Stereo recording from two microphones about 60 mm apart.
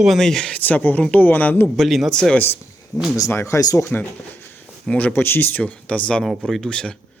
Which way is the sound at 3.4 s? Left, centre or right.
Left.